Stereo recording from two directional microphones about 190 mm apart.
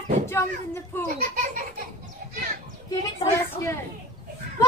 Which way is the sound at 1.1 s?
45° right (ahead or behind).